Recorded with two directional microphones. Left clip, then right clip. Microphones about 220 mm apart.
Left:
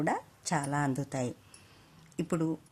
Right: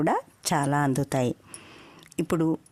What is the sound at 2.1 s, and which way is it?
Speech, 40° right (ahead or behind).